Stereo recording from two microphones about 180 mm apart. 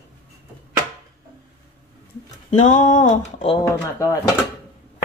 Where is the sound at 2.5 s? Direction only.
45° left (ahead or behind).